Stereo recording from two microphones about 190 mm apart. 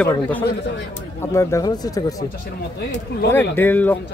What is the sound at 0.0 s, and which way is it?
A man's voice, 10° left (ahead or behind).